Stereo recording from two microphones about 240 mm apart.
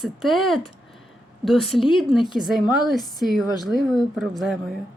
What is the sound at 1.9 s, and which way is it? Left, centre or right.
Speech, centre.